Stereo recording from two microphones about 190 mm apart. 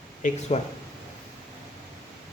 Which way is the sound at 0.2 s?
40° left (ahead or behind).